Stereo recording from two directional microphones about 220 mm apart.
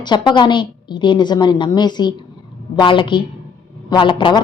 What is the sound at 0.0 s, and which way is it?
A woman's voice, 20° left (ahead or behind).